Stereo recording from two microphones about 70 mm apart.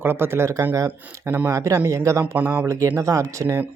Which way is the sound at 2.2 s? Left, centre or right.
Right.